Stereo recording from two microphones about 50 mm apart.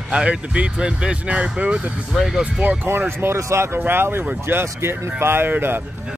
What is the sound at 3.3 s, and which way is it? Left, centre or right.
Speech, right.